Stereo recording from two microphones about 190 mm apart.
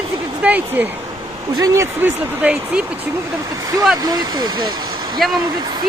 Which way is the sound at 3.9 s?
20° right (ahead or behind).